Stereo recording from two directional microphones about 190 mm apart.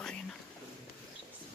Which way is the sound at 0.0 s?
5° left (ahead or behind).